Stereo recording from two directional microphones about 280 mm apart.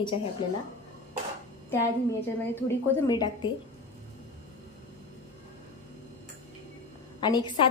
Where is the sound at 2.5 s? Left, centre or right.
Centre.